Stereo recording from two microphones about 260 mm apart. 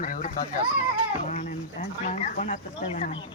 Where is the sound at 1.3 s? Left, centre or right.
Left.